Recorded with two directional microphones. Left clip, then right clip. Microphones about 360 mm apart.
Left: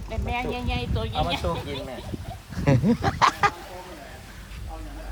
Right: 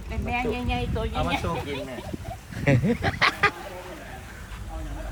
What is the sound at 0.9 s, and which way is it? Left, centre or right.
Speech, centre.